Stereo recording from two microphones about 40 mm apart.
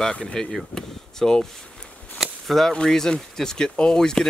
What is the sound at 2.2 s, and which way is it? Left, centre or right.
Cap gun, centre.